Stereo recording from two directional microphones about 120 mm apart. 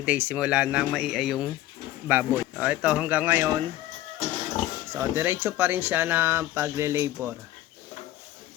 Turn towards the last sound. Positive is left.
turn(degrees=-25)  # may be behind; listen again after turning